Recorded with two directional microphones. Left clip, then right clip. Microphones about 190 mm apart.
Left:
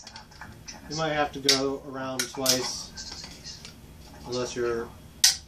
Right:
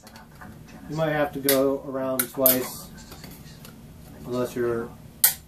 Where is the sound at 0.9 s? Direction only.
10° right (ahead or behind).